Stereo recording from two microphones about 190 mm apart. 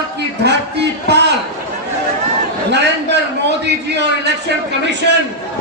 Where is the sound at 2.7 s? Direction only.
65° right (ahead or behind).